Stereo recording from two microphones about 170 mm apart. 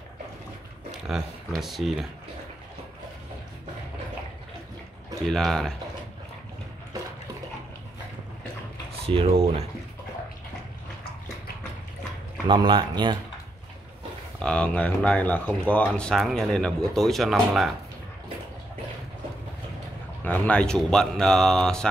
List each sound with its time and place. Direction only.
1.0 s speech: centre (ahead or behind)
5.2 s speech: centre (ahead or behind)
9.0 s speech: 35° right (ahead or behind)
12.4 s speech: 30° right (ahead or behind)
14.4 s speech: 5° left (ahead or behind)
20.2 s speech: 10° left (ahead or behind)